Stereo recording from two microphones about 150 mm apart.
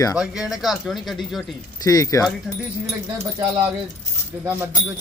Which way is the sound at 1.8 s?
25° left (ahead or behind).